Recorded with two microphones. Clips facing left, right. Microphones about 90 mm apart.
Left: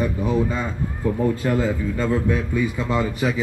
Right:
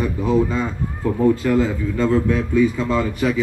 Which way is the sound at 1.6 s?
5° left (ahead or behind).